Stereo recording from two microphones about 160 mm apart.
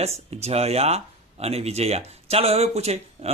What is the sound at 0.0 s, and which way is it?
Speech, 40° right (ahead or behind).